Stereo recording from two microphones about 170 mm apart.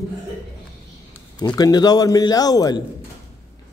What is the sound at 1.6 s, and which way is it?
A man's voice, 25° left (ahead or behind).